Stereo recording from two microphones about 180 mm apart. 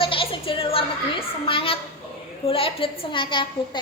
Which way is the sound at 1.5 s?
30° left (ahead or behind).